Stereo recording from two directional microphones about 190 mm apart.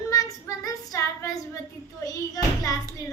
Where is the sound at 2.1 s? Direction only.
20° left (ahead or behind).